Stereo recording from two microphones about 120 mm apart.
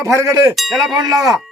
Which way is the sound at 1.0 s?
30° right (ahead or behind).